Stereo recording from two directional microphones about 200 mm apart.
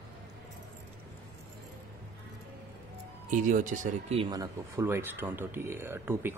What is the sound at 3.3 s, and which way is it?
Speech, 40° right (ahead or behind).